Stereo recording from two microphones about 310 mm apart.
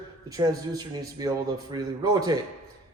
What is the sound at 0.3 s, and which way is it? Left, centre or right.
Speech, centre.